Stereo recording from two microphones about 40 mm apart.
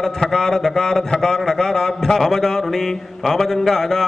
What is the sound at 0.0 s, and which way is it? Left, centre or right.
A man's voice, centre.